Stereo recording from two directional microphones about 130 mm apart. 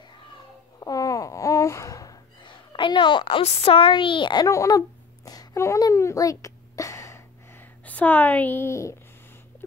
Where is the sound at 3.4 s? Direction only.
45° left (ahead or behind).